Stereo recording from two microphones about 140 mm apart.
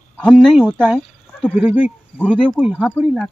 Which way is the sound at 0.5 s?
5° left (ahead or behind).